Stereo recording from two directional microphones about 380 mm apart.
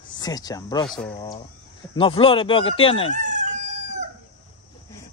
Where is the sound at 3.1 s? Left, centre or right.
Centre.